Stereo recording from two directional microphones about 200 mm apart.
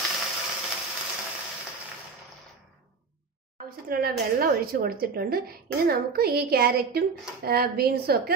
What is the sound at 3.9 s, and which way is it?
A woman's voice, 50° right (ahead or behind).